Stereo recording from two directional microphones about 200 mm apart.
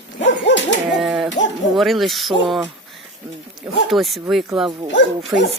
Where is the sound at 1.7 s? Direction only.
Centre (ahead or behind).